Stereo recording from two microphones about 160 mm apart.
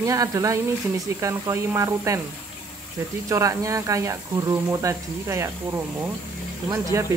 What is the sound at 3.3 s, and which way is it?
Speech, 20° right (ahead or behind).